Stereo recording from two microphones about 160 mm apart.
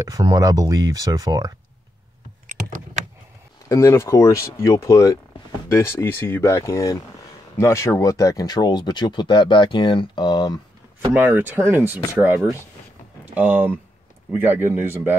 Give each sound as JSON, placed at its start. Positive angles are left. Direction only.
{"t": 0.0, "sound": "speech", "side_deg": -25}
{"t": 2.4, "sound": "computer keyboard", "side_deg": -50}
{"t": 3.6, "sound": "speech", "side_deg": 15}
{"t": 11.1, "sound": "speech", "side_deg": -10}
{"t": 13.2, "sound": "speech", "side_deg": -10}